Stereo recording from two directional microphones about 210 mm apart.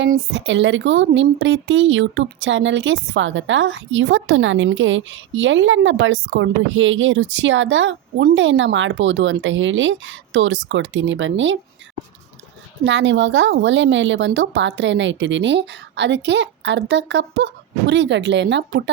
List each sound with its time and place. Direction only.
0.3 s speech: 60° right (ahead or behind)
12.8 s speech: 60° right (ahead or behind)